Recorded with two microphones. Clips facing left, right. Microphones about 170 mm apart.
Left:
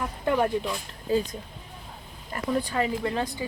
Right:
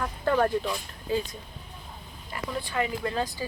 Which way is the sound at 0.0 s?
15° left (ahead or behind).